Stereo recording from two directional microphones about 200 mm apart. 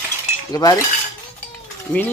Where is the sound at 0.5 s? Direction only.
20° left (ahead or behind).